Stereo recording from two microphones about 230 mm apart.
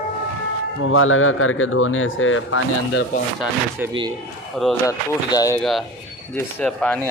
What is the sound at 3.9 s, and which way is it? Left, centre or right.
Speech, right.